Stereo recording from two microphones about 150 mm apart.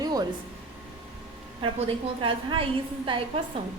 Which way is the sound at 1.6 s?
35° right (ahead or behind).